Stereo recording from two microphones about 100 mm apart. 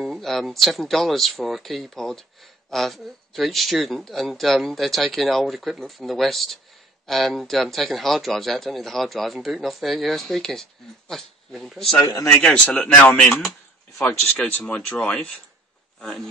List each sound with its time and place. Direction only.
0.0 s a man's voice: centre (ahead or behind)
12.0 s speech: 35° left (ahead or behind)
12.4 s speech: 10° left (ahead or behind)
14.4 s a man's voice: 15° left (ahead or behind)